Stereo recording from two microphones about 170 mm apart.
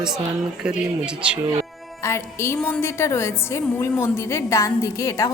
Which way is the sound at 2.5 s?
10° left (ahead or behind).